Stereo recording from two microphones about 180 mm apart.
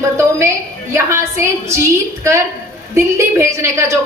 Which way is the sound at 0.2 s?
15° right (ahead or behind).